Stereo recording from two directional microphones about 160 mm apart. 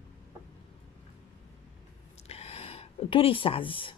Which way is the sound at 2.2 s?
40° left (ahead or behind).